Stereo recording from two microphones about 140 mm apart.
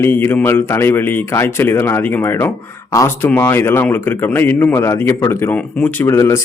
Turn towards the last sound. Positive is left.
turn(degrees=20)  # may be behind; listen again after turning